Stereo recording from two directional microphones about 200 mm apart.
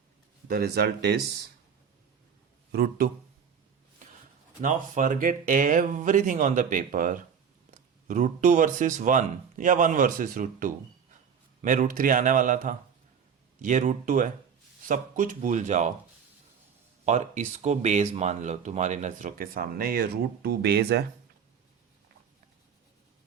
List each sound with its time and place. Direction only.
0.4 s speech: 50° right (ahead or behind)
2.7 s speech: 50° right (ahead or behind)
4.6 s speech: 40° right (ahead or behind)
17.1 s speech: 35° right (ahead or behind); by 21.0 s 55° right (ahead or behind)